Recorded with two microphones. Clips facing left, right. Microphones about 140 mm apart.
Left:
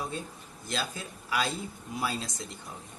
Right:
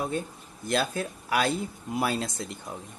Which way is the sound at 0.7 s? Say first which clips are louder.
Right 8 dB; 55° right (ahead or behind).